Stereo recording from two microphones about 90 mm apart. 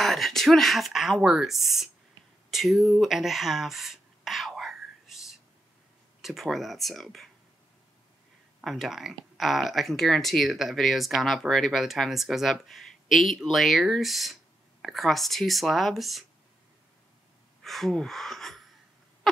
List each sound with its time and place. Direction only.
0.0 s speech: centre (ahead or behind)
2.5 s a sound: centre (ahead or behind)
6.2 s speech: centre (ahead or behind)
8.6 s speech: centre (ahead or behind)
17.6 s speech: centre (ahead or behind)